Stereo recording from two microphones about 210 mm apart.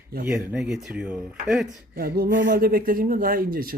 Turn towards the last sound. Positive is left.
turn(degrees=-45)  # may be behind; listen again after turning